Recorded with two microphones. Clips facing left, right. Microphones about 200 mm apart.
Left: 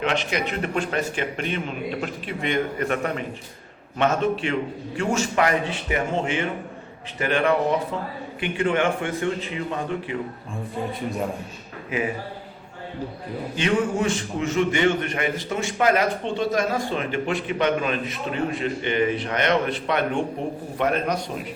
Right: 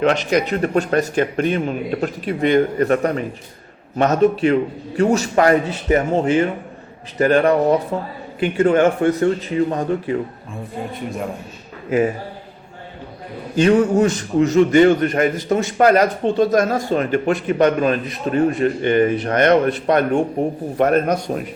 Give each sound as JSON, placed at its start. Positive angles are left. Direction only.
{"t": 0.0, "sound": "speech", "side_deg": -40}
{"t": 13.6, "sound": "a man's voice", "side_deg": -40}